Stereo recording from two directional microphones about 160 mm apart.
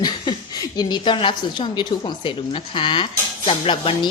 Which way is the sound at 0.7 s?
25° left (ahead or behind).